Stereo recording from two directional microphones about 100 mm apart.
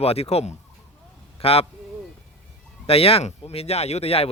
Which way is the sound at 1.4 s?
80° left.